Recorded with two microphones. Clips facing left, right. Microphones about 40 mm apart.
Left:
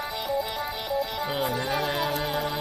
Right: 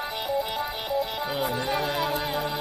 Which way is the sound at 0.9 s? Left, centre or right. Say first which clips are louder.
Even; centre.